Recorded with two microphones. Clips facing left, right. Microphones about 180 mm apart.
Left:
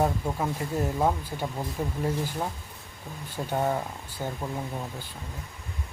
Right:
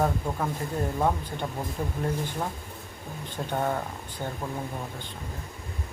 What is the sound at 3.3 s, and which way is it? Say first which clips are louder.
Speech: left 1 dB; 10° left (ahead or behind).